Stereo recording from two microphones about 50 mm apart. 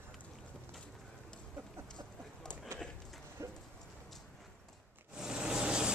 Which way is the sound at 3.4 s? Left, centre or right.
Right.